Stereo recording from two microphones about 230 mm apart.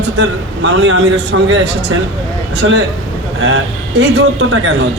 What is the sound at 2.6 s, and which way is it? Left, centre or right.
A man's voice, right.